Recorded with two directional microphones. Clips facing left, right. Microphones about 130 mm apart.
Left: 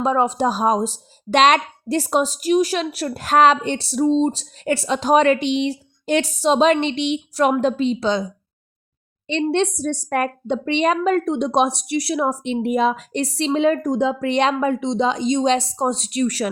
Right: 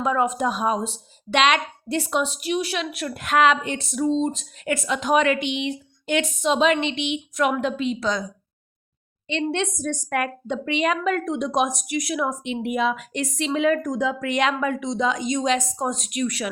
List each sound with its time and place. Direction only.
0.0 s speech: 30° left (ahead or behind)
9.2 s speech: 35° left (ahead or behind)